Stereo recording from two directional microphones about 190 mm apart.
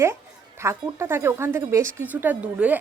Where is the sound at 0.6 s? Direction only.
15° right (ahead or behind).